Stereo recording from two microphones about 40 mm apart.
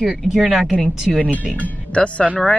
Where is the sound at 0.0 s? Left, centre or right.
Centre.